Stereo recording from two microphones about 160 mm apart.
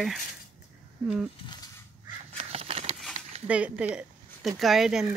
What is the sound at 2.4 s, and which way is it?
Crow, 40° right (ahead or behind).